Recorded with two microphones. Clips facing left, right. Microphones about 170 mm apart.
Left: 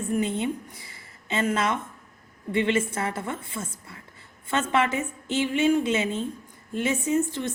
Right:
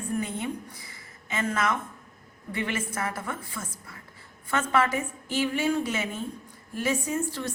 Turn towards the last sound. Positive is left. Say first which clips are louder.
# left 5 dB
turn(degrees=20)  # may be behind; listen again after turning